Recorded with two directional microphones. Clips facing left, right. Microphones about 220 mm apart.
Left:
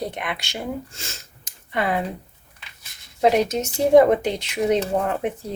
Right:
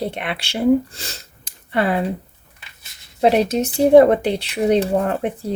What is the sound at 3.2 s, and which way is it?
Speech, 30° right (ahead or behind).